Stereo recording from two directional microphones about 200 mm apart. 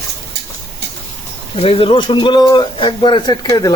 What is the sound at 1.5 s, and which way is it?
Speech, 30° left (ahead or behind).